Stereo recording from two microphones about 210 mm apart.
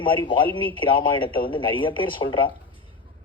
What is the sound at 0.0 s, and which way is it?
Speech, 25° left (ahead or behind).